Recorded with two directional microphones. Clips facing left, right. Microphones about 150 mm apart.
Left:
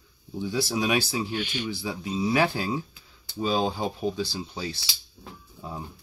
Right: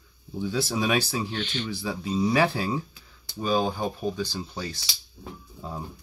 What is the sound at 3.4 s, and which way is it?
Speech, 15° left (ahead or behind).